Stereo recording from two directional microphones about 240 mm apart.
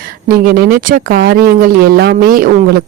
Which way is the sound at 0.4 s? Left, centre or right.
Right.